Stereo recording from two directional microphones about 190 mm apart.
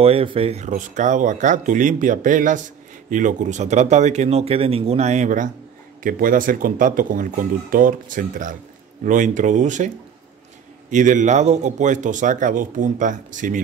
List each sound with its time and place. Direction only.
0.0 s a man's voice: 30° right (ahead or behind)